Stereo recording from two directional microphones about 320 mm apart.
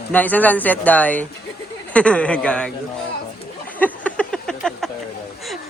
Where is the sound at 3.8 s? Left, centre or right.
Centre.